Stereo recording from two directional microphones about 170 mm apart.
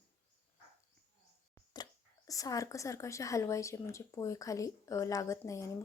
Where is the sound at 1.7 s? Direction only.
20° left (ahead or behind).